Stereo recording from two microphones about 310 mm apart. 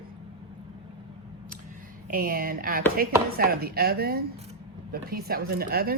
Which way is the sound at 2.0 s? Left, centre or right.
Right.